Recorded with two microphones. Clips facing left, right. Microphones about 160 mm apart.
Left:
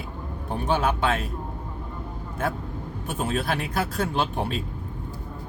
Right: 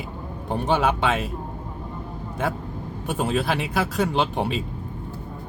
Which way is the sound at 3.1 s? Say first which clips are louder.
Right 3 dB; 90° right.